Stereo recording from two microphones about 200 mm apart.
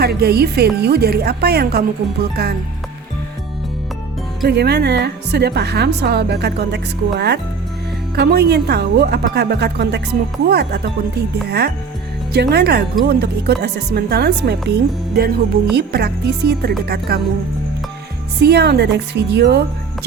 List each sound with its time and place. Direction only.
0.0 s speech: 50° right (ahead or behind)
4.4 s speech: 55° right (ahead or behind)
18.3 s speech: 55° right (ahead or behind)